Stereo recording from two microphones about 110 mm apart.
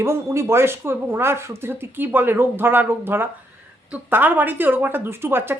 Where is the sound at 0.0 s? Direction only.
25° right (ahead or behind).